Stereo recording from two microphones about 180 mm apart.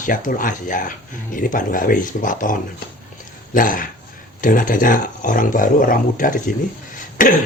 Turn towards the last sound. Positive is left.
turn(degrees=50)  # may be behind; listen again after turning